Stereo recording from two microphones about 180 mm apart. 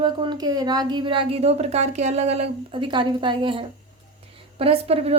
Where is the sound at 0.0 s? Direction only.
25° right (ahead or behind).